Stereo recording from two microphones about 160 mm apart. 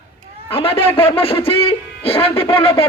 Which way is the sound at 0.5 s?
35° left (ahead or behind).